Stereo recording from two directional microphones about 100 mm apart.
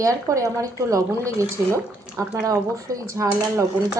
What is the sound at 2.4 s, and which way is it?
Speech, 35° right (ahead or behind).